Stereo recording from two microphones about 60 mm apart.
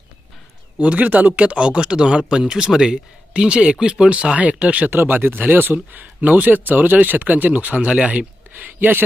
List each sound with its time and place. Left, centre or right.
0.8 s speech: right
4.9 s speech: right